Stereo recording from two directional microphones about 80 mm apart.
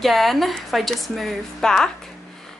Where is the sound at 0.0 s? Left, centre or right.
Centre.